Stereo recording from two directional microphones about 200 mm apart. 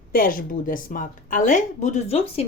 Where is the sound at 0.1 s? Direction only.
45° left (ahead or behind).